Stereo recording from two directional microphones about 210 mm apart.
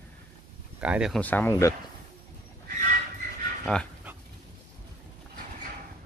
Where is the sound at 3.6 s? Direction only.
5° left (ahead or behind).